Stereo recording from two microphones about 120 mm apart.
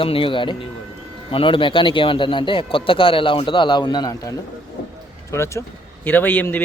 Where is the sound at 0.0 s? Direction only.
50° left (ahead or behind).